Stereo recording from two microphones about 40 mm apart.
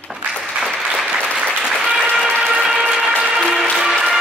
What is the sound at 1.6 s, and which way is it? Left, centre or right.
Applause, centre.